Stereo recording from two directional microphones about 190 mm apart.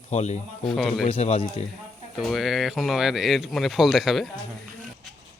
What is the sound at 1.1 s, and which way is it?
Speech, 35° left (ahead or behind).